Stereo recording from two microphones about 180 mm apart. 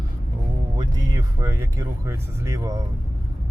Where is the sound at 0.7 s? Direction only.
20° right (ahead or behind).